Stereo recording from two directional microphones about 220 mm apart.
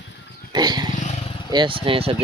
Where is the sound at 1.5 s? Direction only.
20° right (ahead or behind).